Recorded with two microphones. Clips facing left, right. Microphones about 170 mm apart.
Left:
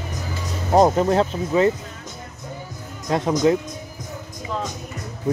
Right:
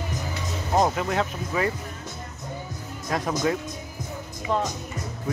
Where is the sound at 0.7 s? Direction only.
35° left (ahead or behind).